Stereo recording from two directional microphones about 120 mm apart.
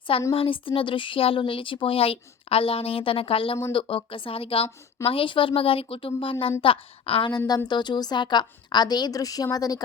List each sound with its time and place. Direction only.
0.3 s speech: 45° left (ahead or behind)
7.3 s a woman's voice: 35° left (ahead or behind)